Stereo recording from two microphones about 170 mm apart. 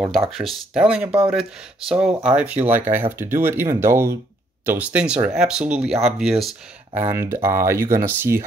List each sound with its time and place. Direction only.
0.3 s speech: centre (ahead or behind)
7.0 s speech: 15° right (ahead or behind)